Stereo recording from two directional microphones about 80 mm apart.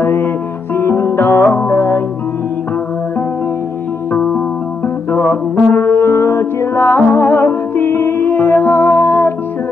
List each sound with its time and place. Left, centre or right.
0.0 s music: left
4.8 s music: left
6.8 s music: centre